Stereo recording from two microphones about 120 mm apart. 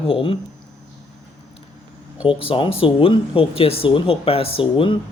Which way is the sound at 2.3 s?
50° left (ahead or behind).